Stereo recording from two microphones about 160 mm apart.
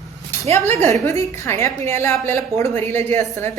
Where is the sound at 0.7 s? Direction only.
15° left (ahead or behind).